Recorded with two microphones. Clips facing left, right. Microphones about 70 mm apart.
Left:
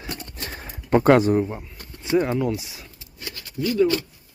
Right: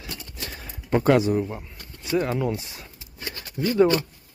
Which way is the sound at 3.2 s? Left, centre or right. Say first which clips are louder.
Even; right.